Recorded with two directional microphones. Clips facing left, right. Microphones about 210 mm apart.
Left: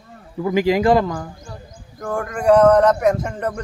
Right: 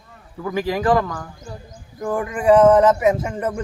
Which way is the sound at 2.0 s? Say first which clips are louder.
Right 1 dB; 5° right (ahead or behind).